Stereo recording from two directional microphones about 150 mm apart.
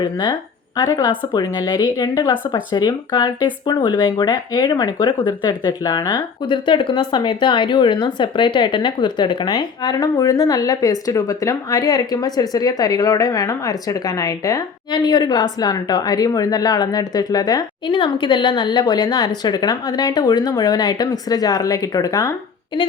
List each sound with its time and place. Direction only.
0.0 s speech: 30° left (ahead or behind)